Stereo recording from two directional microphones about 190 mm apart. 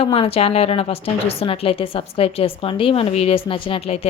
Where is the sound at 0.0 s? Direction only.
30° left (ahead or behind).